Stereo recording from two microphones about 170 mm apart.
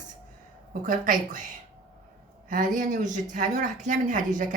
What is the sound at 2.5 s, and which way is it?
A woman's voice, 50° right (ahead or behind).